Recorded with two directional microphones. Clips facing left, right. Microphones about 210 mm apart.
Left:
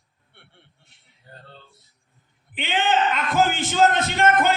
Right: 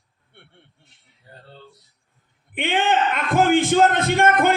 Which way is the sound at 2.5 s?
55° right (ahead or behind).